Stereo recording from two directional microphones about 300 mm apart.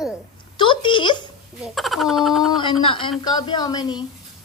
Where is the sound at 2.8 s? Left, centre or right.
Centre.